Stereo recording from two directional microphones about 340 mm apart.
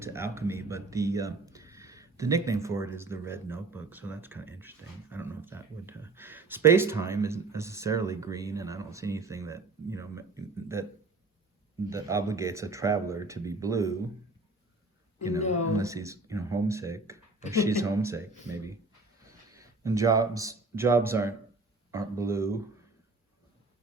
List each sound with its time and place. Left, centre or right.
0.0 s speech: centre
11.9 s speech: centre
15.7 s speech: centre